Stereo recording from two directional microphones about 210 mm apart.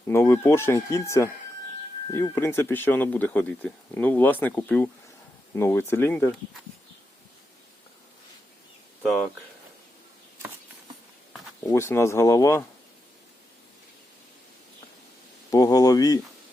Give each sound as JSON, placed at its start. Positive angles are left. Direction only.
{"t": 0.1, "sound": "speech", "side_deg": 10}
{"t": 11.6, "sound": "speech", "side_deg": 15}
{"t": 15.4, "sound": "speech", "side_deg": 15}